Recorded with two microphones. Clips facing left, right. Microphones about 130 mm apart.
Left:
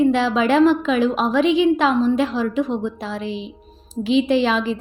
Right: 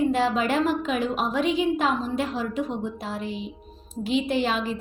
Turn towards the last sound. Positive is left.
turn(degrees=90)